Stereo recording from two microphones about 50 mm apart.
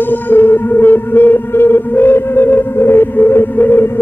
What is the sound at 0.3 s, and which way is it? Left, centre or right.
Music, left.